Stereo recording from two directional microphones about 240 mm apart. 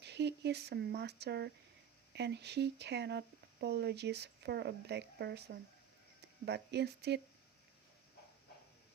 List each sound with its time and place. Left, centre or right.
0.0 s speech: right